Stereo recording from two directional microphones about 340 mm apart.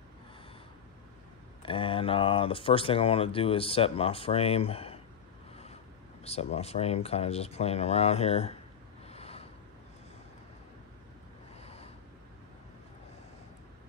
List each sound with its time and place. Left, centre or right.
1.6 s speech: centre
6.2 s speech: centre
9.0 s snort: centre
11.6 s a sound: centre